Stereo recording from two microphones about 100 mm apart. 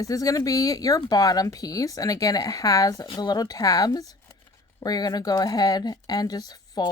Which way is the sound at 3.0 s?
50° left (ahead or behind).